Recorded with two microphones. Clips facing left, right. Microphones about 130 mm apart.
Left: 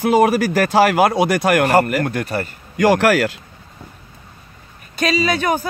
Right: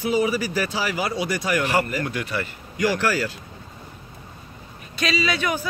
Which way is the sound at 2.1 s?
45° left (ahead or behind).